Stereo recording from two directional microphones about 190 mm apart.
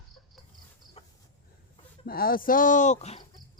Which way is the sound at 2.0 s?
50° left (ahead or behind).